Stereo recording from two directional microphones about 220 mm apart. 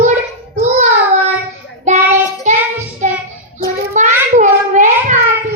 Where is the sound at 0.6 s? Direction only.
35° right (ahead or behind).